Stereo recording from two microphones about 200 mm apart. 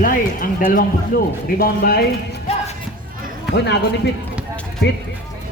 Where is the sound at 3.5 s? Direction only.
60° left (ahead or behind).